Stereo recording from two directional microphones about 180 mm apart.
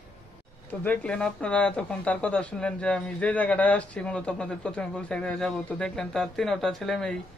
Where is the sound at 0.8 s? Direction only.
5° left (ahead or behind).